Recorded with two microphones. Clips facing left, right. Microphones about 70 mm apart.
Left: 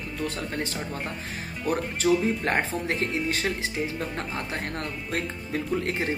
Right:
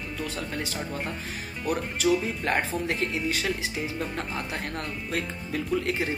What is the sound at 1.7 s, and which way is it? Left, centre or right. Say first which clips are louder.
Speech: left 1 dB; left.